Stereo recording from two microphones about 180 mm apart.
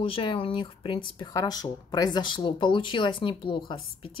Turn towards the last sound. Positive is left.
turn(degrees=30)  # may be behind; listen again after turning